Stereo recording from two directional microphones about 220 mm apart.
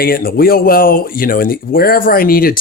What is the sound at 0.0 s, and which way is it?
Speech, 40° left (ahead or behind).